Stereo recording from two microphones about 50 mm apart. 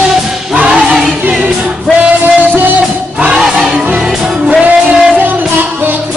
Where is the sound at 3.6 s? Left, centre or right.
Right.